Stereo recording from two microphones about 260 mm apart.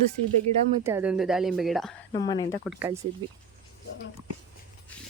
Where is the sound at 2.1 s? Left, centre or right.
Centre.